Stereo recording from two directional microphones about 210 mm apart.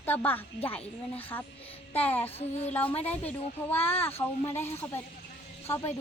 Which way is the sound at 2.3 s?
30° left (ahead or behind).